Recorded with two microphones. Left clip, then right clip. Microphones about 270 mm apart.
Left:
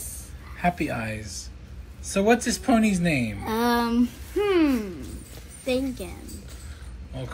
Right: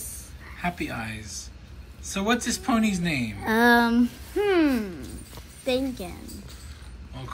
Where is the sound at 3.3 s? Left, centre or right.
Right.